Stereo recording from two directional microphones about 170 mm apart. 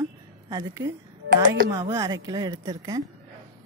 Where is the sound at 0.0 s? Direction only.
20° right (ahead or behind).